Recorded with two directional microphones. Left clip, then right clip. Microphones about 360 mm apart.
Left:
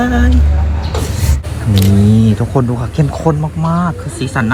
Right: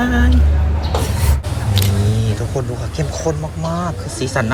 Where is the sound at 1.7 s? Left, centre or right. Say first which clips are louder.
Left 8 dB; centre.